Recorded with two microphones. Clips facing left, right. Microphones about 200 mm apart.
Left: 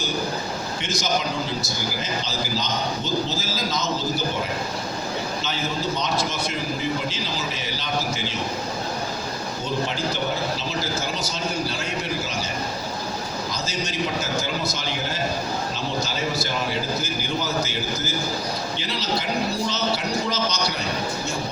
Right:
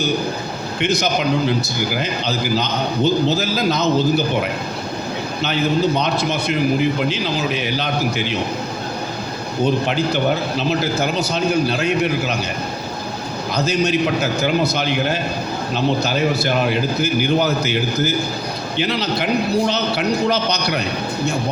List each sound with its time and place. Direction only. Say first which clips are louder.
0.8 s a man's voice: right 8 dB; 60° right (ahead or behind)
9.6 s a man's voice: right 7 dB; 65° right (ahead or behind)
13.5 s a man's voice: right 16 dB; 60° right (ahead or behind)